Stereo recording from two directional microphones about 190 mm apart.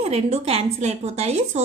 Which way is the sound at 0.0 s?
35° right (ahead or behind).